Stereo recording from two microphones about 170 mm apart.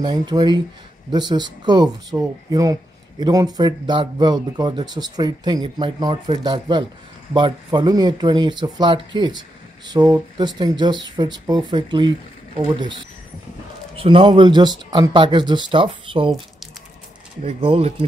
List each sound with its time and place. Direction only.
0.0 s speech: 25° right (ahead or behind)
13.9 s speech: 30° right (ahead or behind)
17.5 s speech: 35° right (ahead or behind)